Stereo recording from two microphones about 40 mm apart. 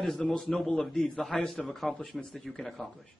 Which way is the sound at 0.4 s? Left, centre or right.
Centre.